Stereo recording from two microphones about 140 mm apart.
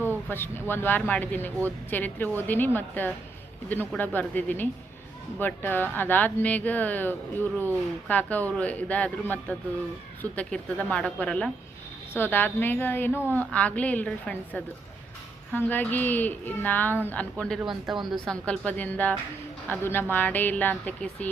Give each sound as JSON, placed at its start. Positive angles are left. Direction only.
{"t": 0.3, "sound": "speech", "side_deg": 15}
{"t": 17.7, "sound": "speech", "side_deg": -35}
{"t": 18.1, "sound": "speech", "side_deg": 5}